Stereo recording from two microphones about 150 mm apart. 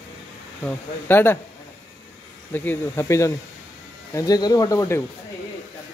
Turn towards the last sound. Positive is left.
turn(degrees=20)  # may be behind; listen again after turning